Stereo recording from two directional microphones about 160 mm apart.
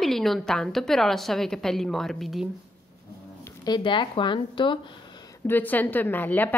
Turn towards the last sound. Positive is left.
turn(degrees=10)  # may be behind; listen again after turning